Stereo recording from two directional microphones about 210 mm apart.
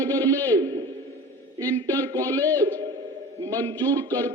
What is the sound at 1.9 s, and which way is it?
A man's voice, 15° right (ahead or behind).